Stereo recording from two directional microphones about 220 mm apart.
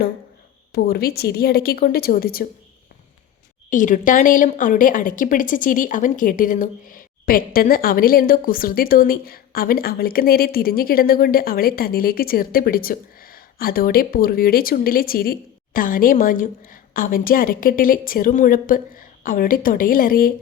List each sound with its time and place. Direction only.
0.7 s a woman's voice: 45° left (ahead or behind)
3.7 s a woman's voice: 35° left (ahead or behind)